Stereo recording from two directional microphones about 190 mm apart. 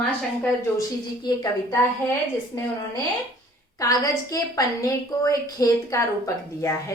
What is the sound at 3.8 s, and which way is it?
A woman's voice, 20° left (ahead or behind).